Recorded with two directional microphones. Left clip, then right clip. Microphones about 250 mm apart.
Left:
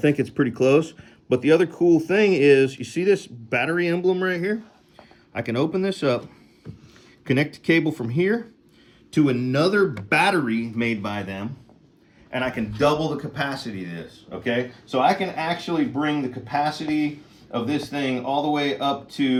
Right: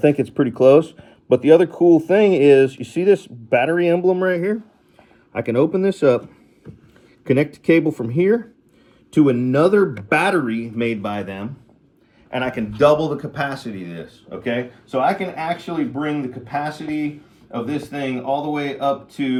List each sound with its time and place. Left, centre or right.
0.0 s speech: centre
1.0 s a sound: centre
1.6 s speech: centre
7.3 s speech: centre
9.9 s speech: centre